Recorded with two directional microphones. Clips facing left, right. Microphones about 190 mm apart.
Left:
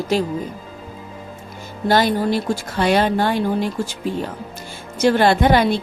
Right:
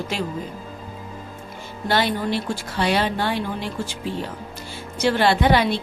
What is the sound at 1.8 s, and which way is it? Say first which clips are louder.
Music: left 5 dB; 40° left (ahead or behind).